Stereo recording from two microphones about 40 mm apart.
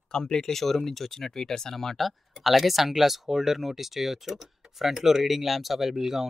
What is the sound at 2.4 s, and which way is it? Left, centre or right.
Speech, centre.